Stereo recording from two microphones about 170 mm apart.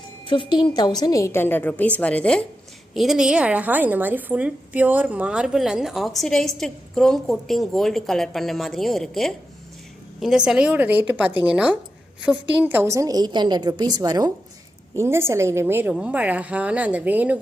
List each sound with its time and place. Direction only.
0.3 s a woman's voice: 30° left (ahead or behind); by 17.3 s 10° right (ahead or behind)